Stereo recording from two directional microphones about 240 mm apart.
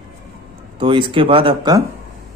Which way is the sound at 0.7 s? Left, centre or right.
Right.